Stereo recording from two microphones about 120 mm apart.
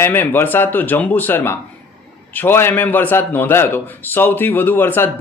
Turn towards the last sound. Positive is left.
turn(degrees=15)  # may be behind; listen again after turning